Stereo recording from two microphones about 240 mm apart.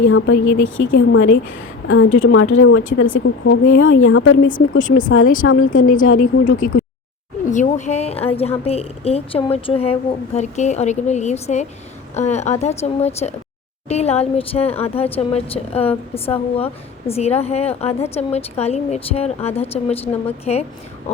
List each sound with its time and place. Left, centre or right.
0.1 s a woman's voice: left
4.8 s speech: left
5.5 s a woman's voice: left
5.8 s speech: left
7.4 s a woman's voice: left